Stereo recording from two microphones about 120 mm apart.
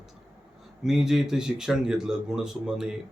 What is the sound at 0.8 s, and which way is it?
A man's voice, 5° right (ahead or behind).